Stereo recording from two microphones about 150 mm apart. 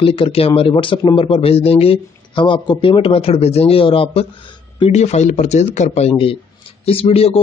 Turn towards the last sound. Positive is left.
turn(degrees=40)  # may be behind; listen again after turning